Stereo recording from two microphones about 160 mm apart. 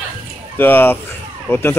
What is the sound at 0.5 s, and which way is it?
Speech, 10° left (ahead or behind).